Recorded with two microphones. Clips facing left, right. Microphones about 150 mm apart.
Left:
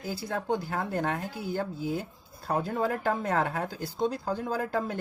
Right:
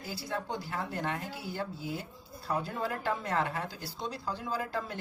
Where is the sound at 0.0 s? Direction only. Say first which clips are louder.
Left 4 dB; 50° left (ahead or behind).